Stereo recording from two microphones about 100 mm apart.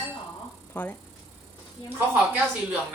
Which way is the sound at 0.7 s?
15° left (ahead or behind).